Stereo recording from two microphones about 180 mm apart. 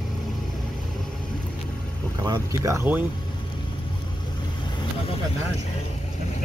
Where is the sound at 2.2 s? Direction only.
15° right (ahead or behind).